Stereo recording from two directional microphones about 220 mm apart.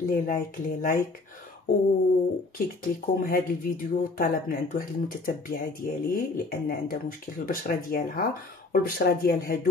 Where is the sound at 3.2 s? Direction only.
40° left (ahead or behind).